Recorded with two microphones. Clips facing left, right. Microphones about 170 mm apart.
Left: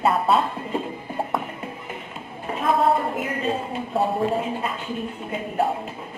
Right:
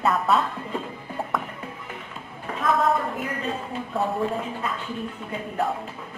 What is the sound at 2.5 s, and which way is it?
A woman's voice, 30° left (ahead or behind).